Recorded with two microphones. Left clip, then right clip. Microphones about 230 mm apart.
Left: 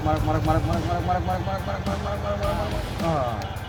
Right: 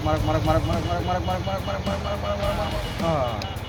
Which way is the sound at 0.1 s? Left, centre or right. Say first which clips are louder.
Right 1 dB; centre.